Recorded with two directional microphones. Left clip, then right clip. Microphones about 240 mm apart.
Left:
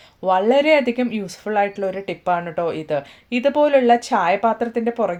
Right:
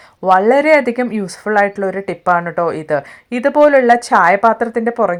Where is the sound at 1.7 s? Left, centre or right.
Right.